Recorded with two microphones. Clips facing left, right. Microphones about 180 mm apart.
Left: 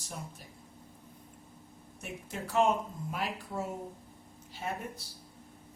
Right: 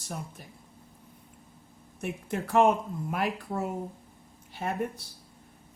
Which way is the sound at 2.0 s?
60° right (ahead or behind).